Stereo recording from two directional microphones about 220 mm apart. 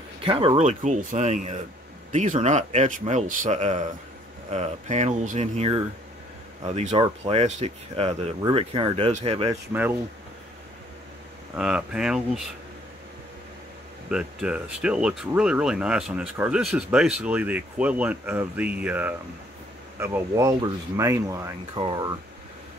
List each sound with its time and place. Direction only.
0.2 s speech: 25° right (ahead or behind)
9.5 s speech: 10° right (ahead or behind)
11.5 s speech: 5° right (ahead or behind)
14.1 s speech: 5° right (ahead or behind)